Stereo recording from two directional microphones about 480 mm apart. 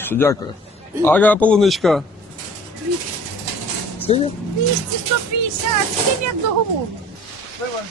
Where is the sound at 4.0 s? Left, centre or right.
Centre.